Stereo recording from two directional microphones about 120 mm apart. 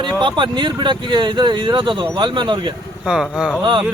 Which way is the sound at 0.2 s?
40° right (ahead or behind).